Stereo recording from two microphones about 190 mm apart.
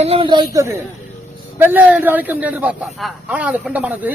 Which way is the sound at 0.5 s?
15° right (ahead or behind).